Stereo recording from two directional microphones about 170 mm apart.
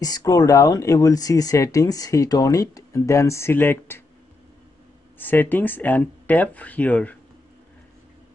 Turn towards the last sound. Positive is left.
turn(degrees=10)  # may be behind; listen again after turning